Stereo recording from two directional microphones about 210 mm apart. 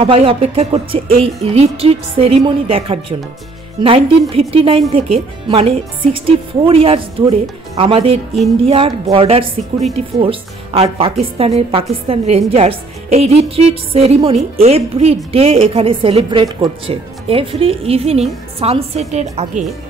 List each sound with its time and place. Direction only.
0.0 s a woman's voice: 25° right (ahead or behind)